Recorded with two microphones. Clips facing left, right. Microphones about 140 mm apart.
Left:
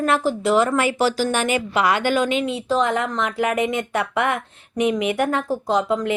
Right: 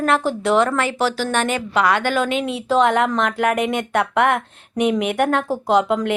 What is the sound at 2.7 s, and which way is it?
Speech, 70° right (ahead or behind).